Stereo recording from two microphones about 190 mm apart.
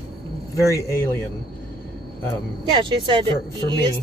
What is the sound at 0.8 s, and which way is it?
Speech, 15° left (ahead or behind).